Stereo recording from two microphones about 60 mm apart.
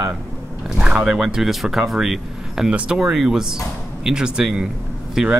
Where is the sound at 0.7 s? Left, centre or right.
Centre.